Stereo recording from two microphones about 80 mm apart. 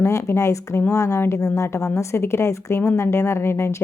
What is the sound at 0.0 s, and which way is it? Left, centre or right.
Speech, left.